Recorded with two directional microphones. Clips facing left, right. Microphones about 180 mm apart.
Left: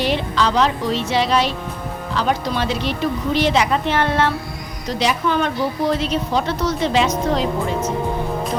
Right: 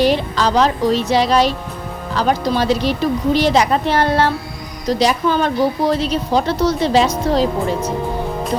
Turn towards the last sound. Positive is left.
turn(degrees=-35)  # may be behind; listen again after turning